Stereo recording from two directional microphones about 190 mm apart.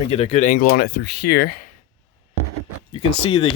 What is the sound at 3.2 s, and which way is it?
Speech, 30° left (ahead or behind).